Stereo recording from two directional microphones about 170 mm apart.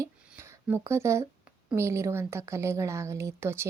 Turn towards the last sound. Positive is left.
turn(degrees=-15)  # may be behind; listen again after turning